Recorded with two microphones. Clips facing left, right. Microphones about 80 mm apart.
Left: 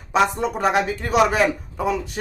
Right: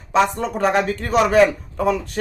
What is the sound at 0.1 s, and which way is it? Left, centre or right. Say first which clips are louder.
A man's voice: right 1 dB; centre.